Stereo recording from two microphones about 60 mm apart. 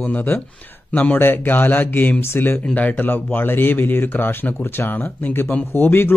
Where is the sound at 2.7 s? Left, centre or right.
Left.